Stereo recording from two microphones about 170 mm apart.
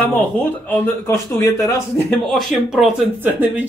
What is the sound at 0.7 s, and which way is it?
Speech, 15° left (ahead or behind).